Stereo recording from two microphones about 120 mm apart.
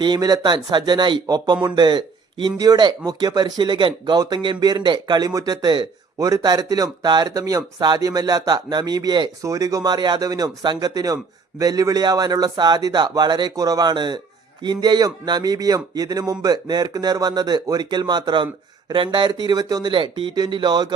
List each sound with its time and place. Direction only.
0.0 s speech: 35° right (ahead or behind)